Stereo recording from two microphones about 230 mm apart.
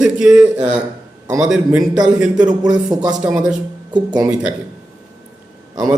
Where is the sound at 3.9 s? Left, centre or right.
Centre.